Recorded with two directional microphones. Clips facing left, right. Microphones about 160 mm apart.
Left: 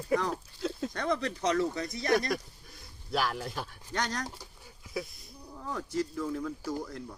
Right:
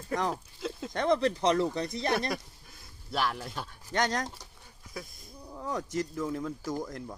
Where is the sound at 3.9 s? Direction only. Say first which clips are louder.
Right 4 dB; 20° right (ahead or behind).